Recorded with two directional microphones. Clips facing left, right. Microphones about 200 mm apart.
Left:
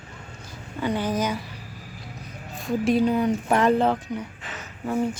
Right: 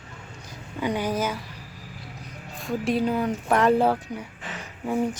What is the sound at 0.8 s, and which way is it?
Speech, 10° right (ahead or behind).